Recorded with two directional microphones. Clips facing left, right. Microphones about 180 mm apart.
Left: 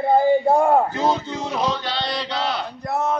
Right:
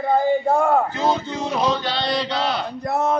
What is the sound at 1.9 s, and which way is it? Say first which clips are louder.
Male singing: right 3 dB; centre (ahead or behind).